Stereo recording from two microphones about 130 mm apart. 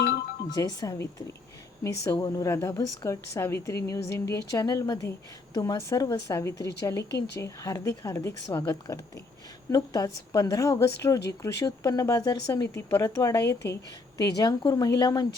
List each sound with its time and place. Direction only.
0.5 s a woman's voice: 30° left (ahead or behind)